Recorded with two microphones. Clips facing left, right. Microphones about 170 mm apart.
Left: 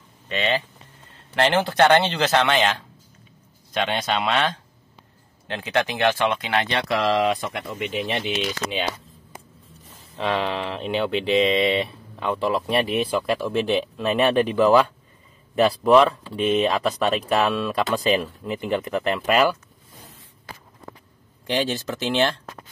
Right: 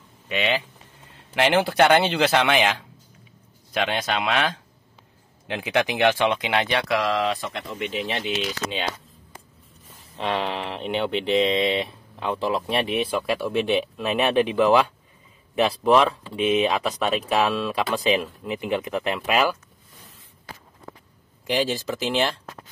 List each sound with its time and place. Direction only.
0.3 s speech: 10° right (ahead or behind)
6.9 s speech: centre (ahead or behind)
7.8 s speech: 15° left (ahead or behind)
10.1 s speech: 25° right (ahead or behind)
11.3 s speech: centre (ahead or behind)
21.5 s speech: 5° right (ahead or behind)